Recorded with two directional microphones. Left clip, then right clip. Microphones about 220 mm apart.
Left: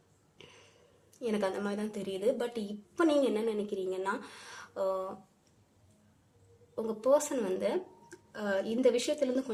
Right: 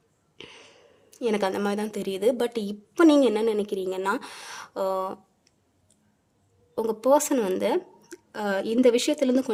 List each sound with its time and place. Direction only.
0.3 s a sound: 50° right (ahead or behind)
1.1 s a woman's voice: 50° right (ahead or behind)
6.7 s a woman's voice: 50° right (ahead or behind)